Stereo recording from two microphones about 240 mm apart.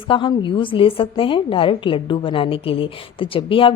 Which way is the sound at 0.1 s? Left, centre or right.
Left.